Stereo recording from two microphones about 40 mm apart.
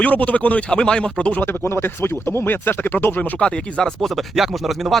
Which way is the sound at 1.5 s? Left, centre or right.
Left.